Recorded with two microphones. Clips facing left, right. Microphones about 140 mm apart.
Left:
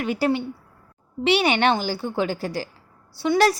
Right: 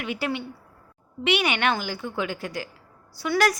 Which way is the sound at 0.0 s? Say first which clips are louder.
Left 6 dB; 40° left (ahead or behind).